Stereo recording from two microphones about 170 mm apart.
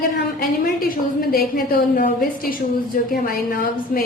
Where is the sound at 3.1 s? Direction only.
60° left (ahead or behind).